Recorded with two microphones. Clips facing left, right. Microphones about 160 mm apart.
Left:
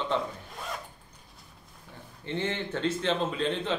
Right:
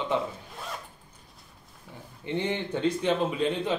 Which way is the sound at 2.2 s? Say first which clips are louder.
Right 2 dB; 15° right (ahead or behind).